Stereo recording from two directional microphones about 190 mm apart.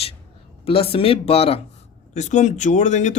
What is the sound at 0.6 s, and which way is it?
Speech, 30° left (ahead or behind).